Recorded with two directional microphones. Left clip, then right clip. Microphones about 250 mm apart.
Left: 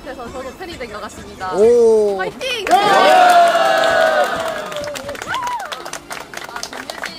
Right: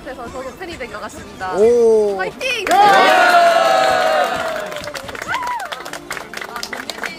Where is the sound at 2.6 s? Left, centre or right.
Right.